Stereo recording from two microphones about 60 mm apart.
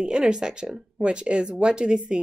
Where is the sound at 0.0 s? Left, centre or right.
Centre.